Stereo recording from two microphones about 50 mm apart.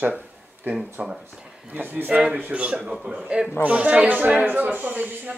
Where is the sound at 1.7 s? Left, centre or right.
Right.